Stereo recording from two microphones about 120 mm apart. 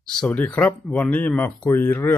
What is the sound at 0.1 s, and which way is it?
Speech, 10° left (ahead or behind).